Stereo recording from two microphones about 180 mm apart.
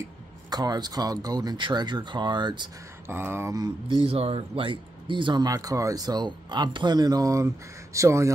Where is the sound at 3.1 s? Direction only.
15° right (ahead or behind).